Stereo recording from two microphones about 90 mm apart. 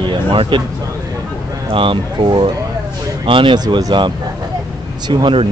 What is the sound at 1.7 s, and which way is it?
Speech, 70° right (ahead or behind).